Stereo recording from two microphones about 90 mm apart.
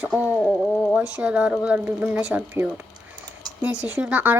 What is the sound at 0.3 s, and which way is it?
Speech, 5° left (ahead or behind).